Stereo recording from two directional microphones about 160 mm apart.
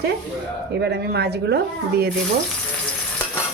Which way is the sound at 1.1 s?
90° right.